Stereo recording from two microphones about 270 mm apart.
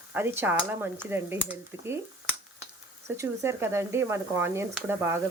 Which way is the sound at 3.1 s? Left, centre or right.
Centre.